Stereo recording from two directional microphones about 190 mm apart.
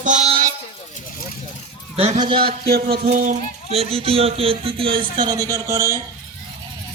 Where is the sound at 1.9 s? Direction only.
30° right (ahead or behind).